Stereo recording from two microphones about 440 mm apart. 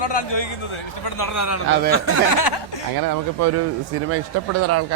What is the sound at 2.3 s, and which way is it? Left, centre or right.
Speech, left.